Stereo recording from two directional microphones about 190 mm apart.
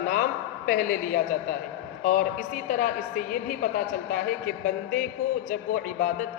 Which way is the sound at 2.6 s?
45° left (ahead or behind).